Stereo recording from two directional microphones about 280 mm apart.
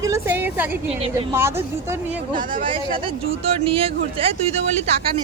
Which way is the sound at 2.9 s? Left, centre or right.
Centre.